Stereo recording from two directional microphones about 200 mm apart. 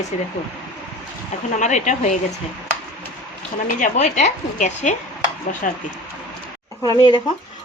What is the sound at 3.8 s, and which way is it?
A woman's voice, 35° left (ahead or behind).